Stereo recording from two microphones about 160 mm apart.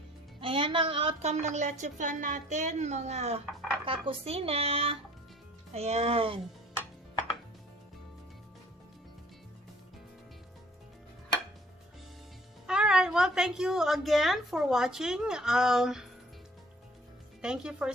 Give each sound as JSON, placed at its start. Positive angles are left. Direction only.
{"t": 0.3, "sound": "speech", "side_deg": -35}
{"t": 12.6, "sound": "a woman's voice", "side_deg": -5}
{"t": 17.4, "sound": "a woman's voice", "side_deg": -5}